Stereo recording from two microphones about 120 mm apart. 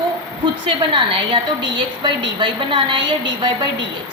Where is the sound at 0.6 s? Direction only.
40° right (ahead or behind).